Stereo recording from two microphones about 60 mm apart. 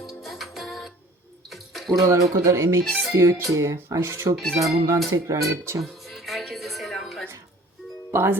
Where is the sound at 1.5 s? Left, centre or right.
Centre.